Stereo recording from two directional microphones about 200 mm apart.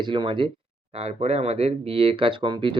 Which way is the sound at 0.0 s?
25° right (ahead or behind).